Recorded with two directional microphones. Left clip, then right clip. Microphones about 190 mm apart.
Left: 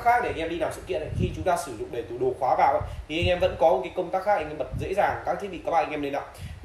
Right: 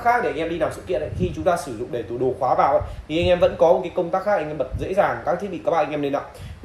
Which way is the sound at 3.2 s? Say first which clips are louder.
Right 5 dB; centre (ahead or behind).